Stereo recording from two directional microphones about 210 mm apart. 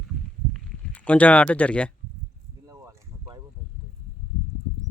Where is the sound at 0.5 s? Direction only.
5° left (ahead or behind).